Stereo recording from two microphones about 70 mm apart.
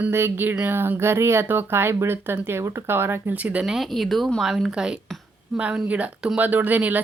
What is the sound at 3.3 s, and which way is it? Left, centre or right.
Speech, right.